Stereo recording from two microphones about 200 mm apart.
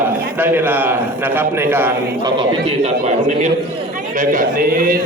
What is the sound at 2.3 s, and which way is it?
A man's voice, 25° right (ahead or behind).